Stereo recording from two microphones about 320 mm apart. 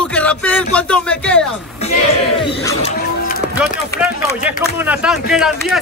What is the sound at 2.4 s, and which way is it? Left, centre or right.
Speech, centre.